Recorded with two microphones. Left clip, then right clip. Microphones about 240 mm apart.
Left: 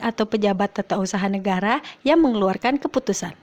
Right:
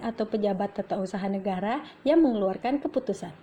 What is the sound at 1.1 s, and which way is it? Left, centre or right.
A woman's voice, left.